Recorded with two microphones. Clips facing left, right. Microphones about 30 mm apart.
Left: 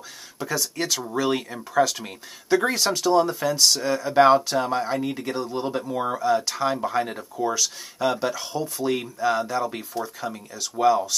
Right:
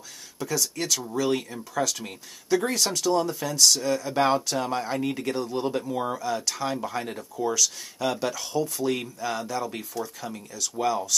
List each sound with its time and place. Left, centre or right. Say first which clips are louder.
0.4 s speech: left 2 dB; centre